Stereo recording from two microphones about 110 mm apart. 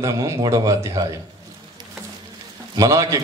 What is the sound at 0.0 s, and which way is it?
A man's voice, 30° right (ahead or behind).